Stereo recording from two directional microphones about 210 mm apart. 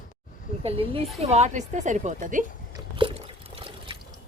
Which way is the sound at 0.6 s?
25° right (ahead or behind).